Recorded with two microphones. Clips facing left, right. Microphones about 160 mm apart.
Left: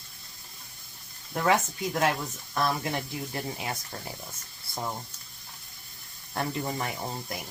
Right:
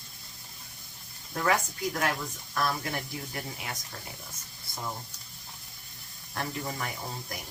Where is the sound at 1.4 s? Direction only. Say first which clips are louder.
Left 2 dB; 20° left (ahead or behind).